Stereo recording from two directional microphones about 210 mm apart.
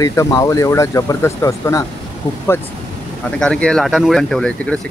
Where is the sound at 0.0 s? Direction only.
15° left (ahead or behind).